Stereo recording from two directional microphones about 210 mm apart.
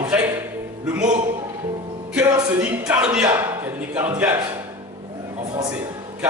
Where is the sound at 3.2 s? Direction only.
10° right (ahead or behind).